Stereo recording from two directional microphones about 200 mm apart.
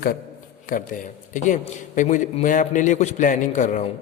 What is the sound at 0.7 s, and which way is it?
A man's voice, 40° left (ahead or behind).